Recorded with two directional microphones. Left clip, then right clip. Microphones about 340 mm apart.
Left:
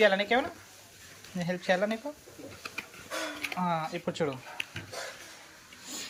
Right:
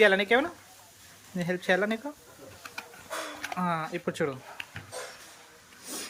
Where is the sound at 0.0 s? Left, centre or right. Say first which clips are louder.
Right 3 dB; centre.